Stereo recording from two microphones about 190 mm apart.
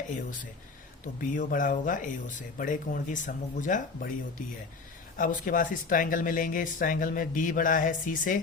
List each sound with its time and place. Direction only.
1.2 s speech: 45° left (ahead or behind)
5.1 s speech: 45° left (ahead or behind)